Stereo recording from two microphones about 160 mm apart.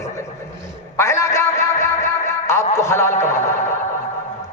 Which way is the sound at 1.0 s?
15° left (ahead or behind).